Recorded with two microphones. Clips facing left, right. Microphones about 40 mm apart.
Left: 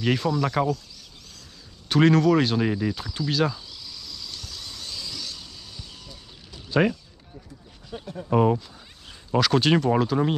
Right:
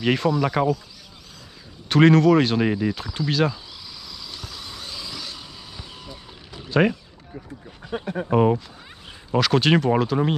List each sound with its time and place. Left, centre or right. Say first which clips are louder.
0.0 s speech: right 3 dB; centre
1.9 s cricket: right 3 dB; centre
6.7 s speech: right 2 dB; centre
7.9 s speech: right 8 dB; right
8.3 s speech: right 1 dB; centre